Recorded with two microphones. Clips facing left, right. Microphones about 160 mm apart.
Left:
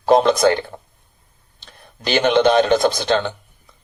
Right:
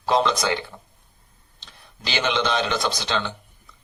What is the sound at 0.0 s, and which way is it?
A man's voice, 50° left (ahead or behind).